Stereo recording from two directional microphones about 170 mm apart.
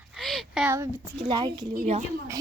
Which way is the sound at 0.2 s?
Centre (ahead or behind).